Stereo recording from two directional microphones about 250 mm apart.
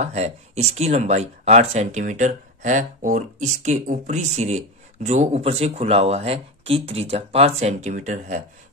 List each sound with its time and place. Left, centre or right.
0.0 s speech: right